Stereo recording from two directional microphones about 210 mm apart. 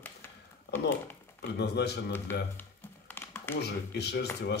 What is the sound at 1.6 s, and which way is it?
Speech, 50° left (ahead or behind).